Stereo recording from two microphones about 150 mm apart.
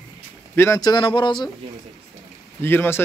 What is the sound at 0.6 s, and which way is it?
Speech, 20° left (ahead or behind).